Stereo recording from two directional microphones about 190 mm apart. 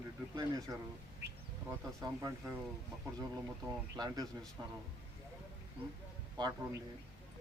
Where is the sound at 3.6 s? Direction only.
20° right (ahead or behind).